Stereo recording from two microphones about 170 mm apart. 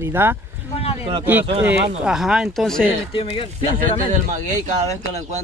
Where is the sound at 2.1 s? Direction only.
5° right (ahead or behind).